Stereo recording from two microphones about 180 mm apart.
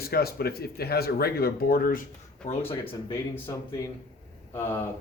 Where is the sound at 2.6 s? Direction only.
10° left (ahead or behind).